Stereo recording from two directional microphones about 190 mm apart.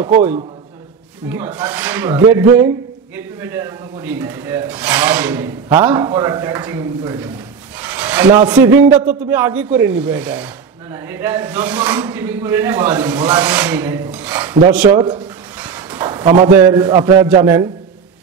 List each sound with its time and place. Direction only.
1.3 s speech: 10° right (ahead or behind)
7.8 s rub: 10° right (ahead or behind)
8.5 s speech: 10° right (ahead or behind)
15.0 s speech: 25° right (ahead or behind)
15.6 s a sound: 10° right (ahead or behind)
16.4 s speech: 15° right (ahead or behind)